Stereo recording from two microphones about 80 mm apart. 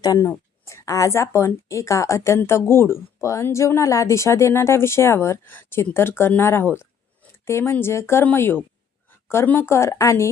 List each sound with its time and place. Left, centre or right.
0.0 s speech: left
0.3 s speech: left